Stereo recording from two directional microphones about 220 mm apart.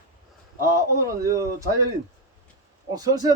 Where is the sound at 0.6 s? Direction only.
15° right (ahead or behind).